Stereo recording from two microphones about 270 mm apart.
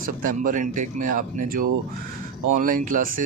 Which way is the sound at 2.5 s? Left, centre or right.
Right.